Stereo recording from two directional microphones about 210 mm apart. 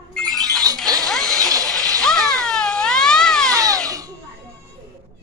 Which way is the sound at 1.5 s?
15° right (ahead or behind).